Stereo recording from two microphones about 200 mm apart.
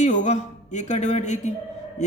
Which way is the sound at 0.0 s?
40° left (ahead or behind).